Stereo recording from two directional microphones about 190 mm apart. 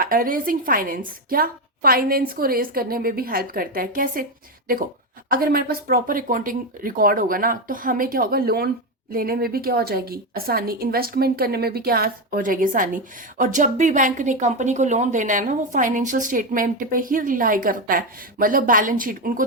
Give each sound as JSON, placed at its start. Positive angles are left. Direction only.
{"t": 0.0, "sound": "a woman's voice", "side_deg": -50}
{"t": 5.3, "sound": "a woman's voice", "side_deg": -50}